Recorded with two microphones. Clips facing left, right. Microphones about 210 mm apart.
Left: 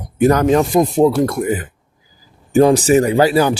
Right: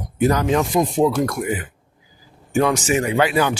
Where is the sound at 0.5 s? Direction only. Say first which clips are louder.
Left 5 dB; 40° left (ahead or behind).